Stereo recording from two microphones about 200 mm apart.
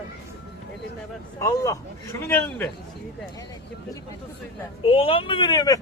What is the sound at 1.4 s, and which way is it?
Speech, 15° left (ahead or behind).